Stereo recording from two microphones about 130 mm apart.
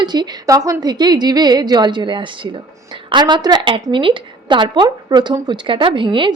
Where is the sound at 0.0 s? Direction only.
35° right (ahead or behind).